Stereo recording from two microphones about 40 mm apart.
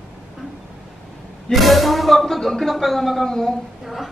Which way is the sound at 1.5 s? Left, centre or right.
Centre.